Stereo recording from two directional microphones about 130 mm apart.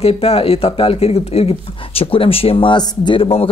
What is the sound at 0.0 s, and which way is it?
A man's voice, 50° left (ahead or behind).